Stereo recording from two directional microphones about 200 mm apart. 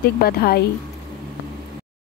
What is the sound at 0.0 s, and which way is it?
Speech, 50° left (ahead or behind).